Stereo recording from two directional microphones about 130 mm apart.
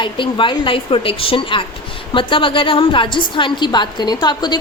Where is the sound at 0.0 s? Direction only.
40° left (ahead or behind).